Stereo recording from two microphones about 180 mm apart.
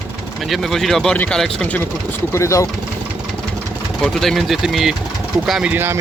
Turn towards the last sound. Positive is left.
turn(degrees=-10)  # may be behind; listen again after turning